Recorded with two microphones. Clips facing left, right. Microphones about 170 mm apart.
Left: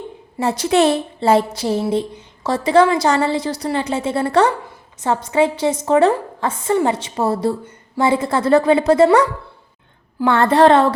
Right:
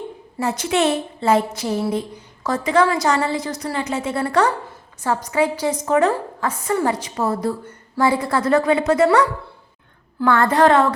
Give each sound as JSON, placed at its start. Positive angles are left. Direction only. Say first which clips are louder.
{"t": 0.3, "sound": "a woman's voice", "louder": "left 4 dB", "side_deg": 30}
{"t": 10.2, "sound": "a woman's voice", "louder": "left 3 dB", "side_deg": 25}